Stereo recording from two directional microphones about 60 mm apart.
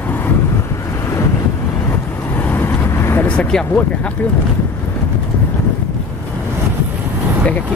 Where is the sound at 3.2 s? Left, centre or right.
Centre.